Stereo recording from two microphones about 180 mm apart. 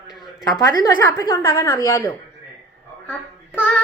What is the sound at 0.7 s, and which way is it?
A woman's voice, 15° left (ahead or behind).